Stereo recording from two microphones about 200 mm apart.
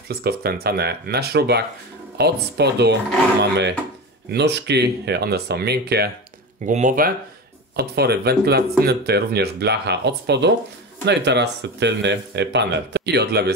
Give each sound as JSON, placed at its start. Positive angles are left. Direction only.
{"t": 0.1, "sound": "speech", "side_deg": -50}
{"t": 4.3, "sound": "speech", "side_deg": -60}
{"t": 6.6, "sound": "speech", "side_deg": -40}